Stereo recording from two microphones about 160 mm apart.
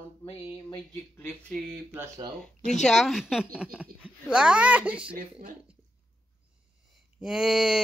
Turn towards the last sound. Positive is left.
turn(degrees=-5)  # may be behind; listen again after turning